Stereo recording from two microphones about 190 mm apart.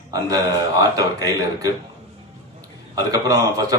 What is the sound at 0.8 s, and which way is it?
Speech, 20° right (ahead or behind).